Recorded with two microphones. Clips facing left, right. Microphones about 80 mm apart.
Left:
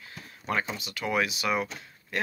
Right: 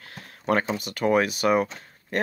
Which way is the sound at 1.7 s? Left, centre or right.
Right.